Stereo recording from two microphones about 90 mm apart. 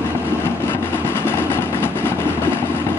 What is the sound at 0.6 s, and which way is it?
Vehicle, 25° left (ahead or behind).